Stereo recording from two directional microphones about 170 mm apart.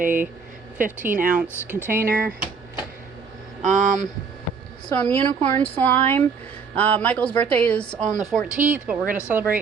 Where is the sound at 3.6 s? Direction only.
45° right (ahead or behind).